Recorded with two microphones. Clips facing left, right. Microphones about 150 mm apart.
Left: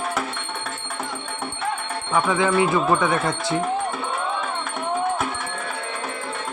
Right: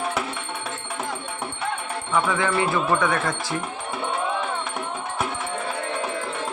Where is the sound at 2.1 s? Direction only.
20° left (ahead or behind).